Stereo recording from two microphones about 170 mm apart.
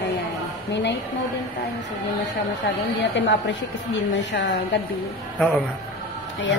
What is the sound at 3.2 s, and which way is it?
A woman's voice, 90° left.